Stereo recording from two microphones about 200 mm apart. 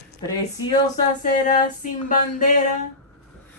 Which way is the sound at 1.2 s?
45° left (ahead or behind).